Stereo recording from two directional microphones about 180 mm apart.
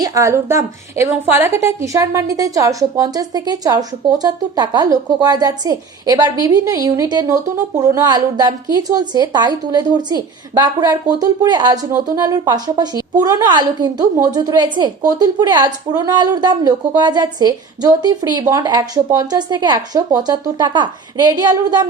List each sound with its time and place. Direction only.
0.0 s a woman's voice: 15° right (ahead or behind)